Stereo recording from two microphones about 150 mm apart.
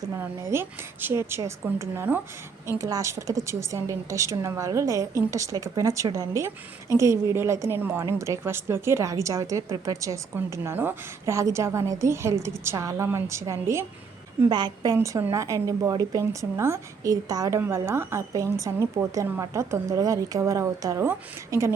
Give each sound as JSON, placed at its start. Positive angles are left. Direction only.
{"t": 0.0, "sound": "a woman's voice", "side_deg": -20}
{"t": 14.9, "sound": "a woman's voice", "side_deg": -15}